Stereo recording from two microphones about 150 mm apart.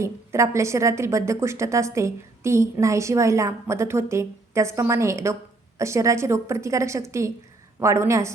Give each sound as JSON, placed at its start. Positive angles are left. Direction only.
{"t": 0.0, "sound": "speech", "side_deg": -20}